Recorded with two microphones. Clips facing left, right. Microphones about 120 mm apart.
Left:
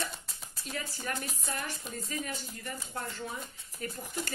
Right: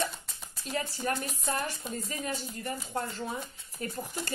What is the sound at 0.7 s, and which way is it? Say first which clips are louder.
Speech: right 6 dB; 35° right (ahead or behind).